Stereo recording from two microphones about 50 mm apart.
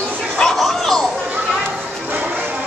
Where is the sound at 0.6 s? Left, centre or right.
Centre.